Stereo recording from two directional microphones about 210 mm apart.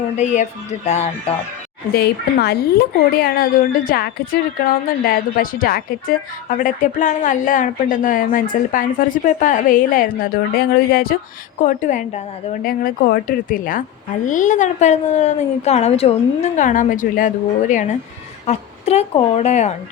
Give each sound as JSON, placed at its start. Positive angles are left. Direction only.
{"t": 1.9, "sound": "a woman's voice", "side_deg": 50}